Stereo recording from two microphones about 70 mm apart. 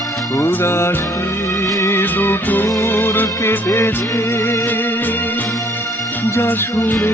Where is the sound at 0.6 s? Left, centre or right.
Left.